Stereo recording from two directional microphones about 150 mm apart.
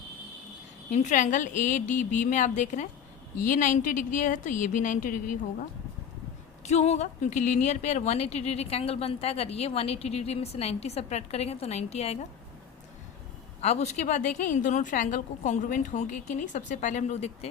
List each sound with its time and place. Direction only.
0.9 s a woman's voice: 55° left (ahead or behind)
6.6 s speech: 45° left (ahead or behind)
13.6 s speech: 45° left (ahead or behind)